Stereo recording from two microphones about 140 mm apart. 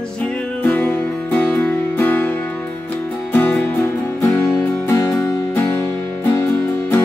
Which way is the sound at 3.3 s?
10° left (ahead or behind).